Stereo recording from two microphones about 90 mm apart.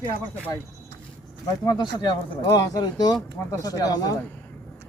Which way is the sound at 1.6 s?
50° left (ahead or behind).